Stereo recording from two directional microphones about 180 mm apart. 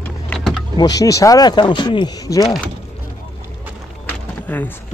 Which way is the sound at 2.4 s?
Centre (ahead or behind).